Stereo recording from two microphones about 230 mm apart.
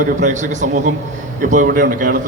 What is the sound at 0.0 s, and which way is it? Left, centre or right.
A man's voice, right.